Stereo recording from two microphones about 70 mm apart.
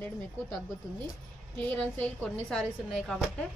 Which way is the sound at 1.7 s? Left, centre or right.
Centre.